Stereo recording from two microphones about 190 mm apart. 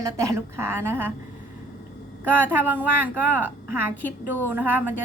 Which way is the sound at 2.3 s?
10° right (ahead or behind).